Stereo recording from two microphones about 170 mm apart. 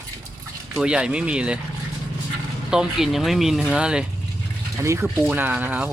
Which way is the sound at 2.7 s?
5° right (ahead or behind).